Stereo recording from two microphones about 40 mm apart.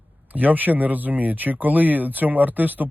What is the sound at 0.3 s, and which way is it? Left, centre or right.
Speech, right.